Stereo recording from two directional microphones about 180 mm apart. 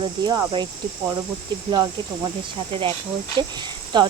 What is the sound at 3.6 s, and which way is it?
Speech, 25° right (ahead or behind).